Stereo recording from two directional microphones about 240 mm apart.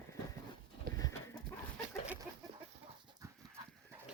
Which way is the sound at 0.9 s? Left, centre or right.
Right.